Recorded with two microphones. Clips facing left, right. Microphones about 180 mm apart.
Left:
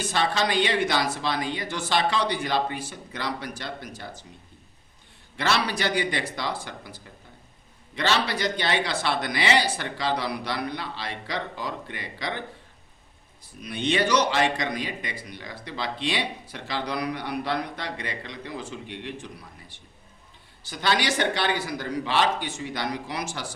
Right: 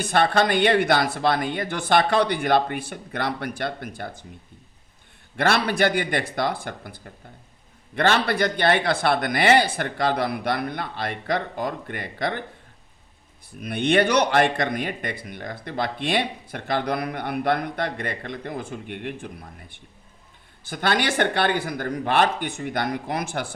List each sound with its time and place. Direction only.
0.0 s speech: 55° right (ahead or behind)
5.4 s speech: 55° right (ahead or behind)
13.6 s speech: 55° right (ahead or behind)